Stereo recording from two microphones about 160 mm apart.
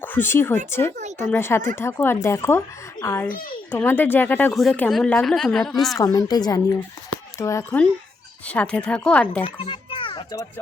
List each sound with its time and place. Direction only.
0.0 s speech: 10° left (ahead or behind)
3.2 s a child's voice: 60° left (ahead or behind)
3.7 s speech: 10° left (ahead or behind)
4.5 s a woman's voice: centre (ahead or behind)
6.0 s a woman's voice: 25° left (ahead or behind)
8.4 s speech: 5° left (ahead or behind)
9.4 s a sound: 30° left (ahead or behind)